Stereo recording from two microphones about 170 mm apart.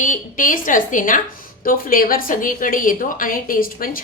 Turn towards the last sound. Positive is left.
turn(degrees=55)  # may be behind; listen again after turning